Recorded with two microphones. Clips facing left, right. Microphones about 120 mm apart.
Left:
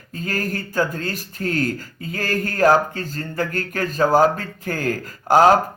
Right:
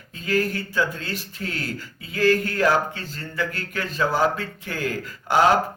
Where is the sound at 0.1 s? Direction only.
45° left (ahead or behind).